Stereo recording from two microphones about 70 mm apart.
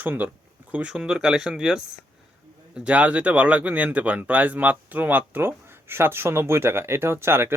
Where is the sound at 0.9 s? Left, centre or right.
Centre.